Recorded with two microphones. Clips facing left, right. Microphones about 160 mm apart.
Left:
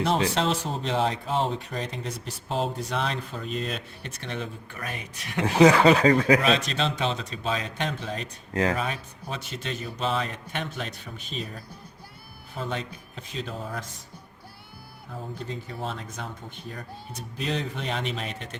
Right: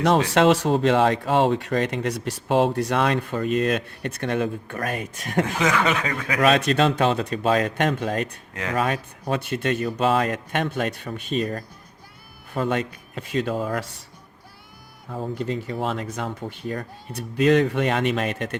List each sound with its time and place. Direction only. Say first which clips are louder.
0.3 s speech: right 9 dB; 75° right (ahead or behind); by 5.5 s 50° right (ahead or behind)
5.5 s speech: left 10 dB; 35° left (ahead or behind)
6.4 s speech: right 6 dB; 55° right (ahead or behind); by 14.0 s 85° right
15.1 s speech: right 8 dB; 75° right (ahead or behind); by 18.5 s 60° right (ahead or behind)